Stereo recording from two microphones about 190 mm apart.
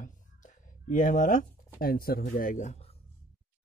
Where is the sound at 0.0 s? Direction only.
45° left (ahead or behind).